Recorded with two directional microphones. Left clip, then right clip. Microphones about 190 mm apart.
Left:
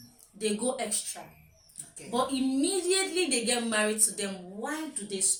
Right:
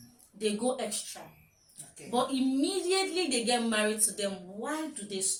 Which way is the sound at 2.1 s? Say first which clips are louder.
Even; 15° right (ahead or behind).